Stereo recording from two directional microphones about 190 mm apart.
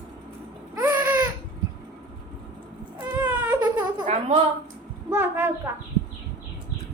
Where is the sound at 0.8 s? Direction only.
15° right (ahead or behind).